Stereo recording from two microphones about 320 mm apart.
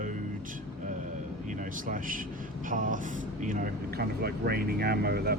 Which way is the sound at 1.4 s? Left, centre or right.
Right.